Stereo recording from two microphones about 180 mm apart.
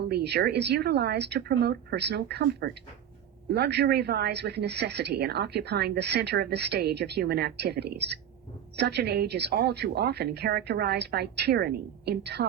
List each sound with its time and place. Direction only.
0.0 s a woman's voice: 65° right (ahead or behind)